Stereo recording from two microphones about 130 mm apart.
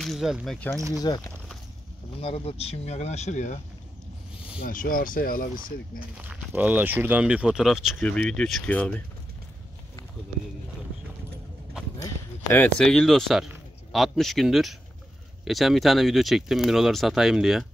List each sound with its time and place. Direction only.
0.0 s speech: centre (ahead or behind)
0.9 s speech: 35° left (ahead or behind)
2.1 s speech: 50° left (ahead or behind); by 3.6 s 65° left (ahead or behind)
4.6 s speech: 90° left
6.1 s speech: 10° right (ahead or behind)
8.0 s speech: 10° left (ahead or behind)
12.0 s clip-clop: 20° left (ahead or behind)
12.7 s speech: 5° left (ahead or behind)